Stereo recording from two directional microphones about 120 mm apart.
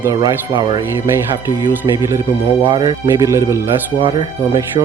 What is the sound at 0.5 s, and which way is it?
Speech, 40° right (ahead or behind).